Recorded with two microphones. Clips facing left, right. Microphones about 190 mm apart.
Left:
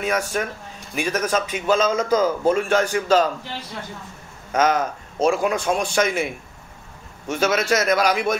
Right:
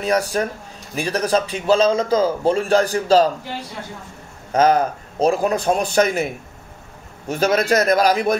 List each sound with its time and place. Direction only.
0.0 s a man's voice: 35° right (ahead or behind)
4.5 s a man's voice: 35° right (ahead or behind)